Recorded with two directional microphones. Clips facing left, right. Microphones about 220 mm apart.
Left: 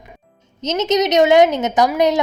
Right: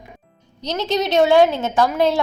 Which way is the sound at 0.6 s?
20° left (ahead or behind).